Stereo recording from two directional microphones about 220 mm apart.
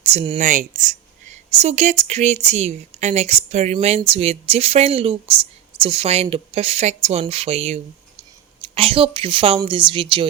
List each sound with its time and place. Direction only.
0.0 s speech: 30° right (ahead or behind)